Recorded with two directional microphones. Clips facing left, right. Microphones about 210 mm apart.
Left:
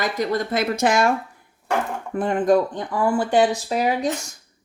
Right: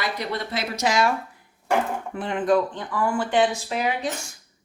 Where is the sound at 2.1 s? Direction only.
45° left (ahead or behind).